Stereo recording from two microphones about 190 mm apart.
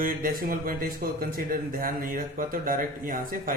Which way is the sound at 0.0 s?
45° right (ahead or behind).